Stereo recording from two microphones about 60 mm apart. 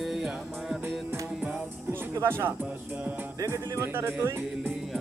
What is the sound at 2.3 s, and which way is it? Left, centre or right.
Music, right.